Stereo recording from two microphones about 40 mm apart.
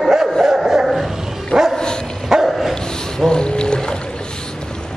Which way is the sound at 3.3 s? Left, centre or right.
Left.